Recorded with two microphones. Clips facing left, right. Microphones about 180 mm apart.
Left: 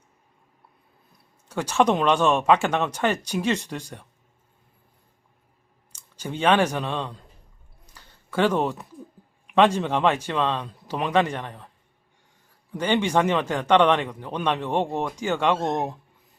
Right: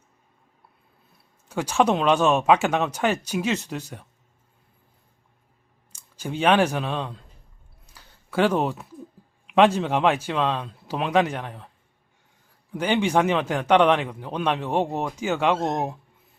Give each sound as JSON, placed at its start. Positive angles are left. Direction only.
{"t": 1.5, "sound": "speech", "side_deg": -10}
{"t": 5.9, "sound": "speech", "side_deg": -10}
{"t": 7.9, "sound": "a sound", "side_deg": -10}
{"t": 9.6, "sound": "speech", "side_deg": -10}
{"t": 12.7, "sound": "speech", "side_deg": -10}